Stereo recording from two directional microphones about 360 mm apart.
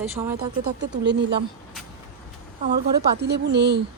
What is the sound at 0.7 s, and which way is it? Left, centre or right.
Speech, right.